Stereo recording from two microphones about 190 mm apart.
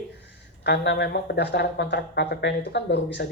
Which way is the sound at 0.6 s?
60° left (ahead or behind).